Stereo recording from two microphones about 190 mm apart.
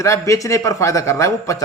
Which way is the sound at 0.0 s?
15° left (ahead or behind).